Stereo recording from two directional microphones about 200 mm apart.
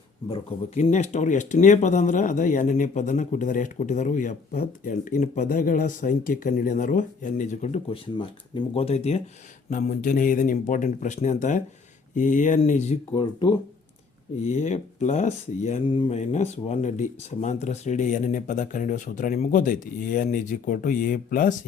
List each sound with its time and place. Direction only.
0.3 s speech: 30° left (ahead or behind)
14.4 s speech: 35° left (ahead or behind)